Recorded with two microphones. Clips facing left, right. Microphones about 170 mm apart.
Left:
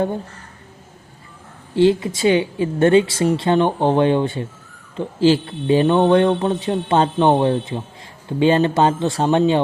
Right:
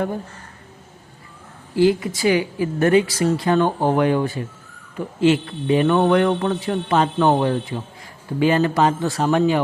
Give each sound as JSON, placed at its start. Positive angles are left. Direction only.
{"t": 1.7, "sound": "speech", "side_deg": 25}